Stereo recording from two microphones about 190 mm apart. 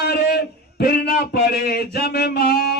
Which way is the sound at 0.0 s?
55° left (ahead or behind).